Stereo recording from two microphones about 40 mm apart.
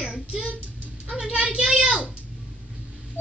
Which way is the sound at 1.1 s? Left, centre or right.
Right.